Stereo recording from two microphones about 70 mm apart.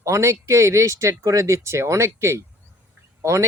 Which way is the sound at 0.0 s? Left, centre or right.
Right.